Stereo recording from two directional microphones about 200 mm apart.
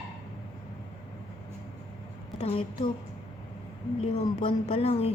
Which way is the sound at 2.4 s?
30° left (ahead or behind).